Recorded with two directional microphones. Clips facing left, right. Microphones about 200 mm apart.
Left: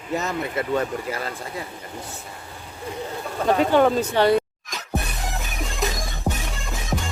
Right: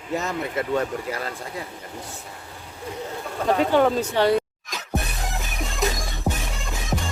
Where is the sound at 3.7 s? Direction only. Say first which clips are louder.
Left 2 dB; 55° left (ahead or behind).